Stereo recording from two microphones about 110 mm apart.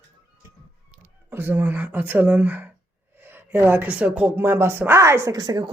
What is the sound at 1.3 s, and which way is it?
Speech, 20° right (ahead or behind).